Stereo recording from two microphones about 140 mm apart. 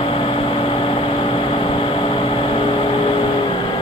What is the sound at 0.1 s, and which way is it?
Vehicle, 40° left (ahead or behind).